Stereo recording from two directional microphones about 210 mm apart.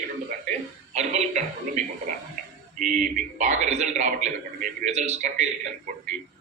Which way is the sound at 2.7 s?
40° right (ahead or behind).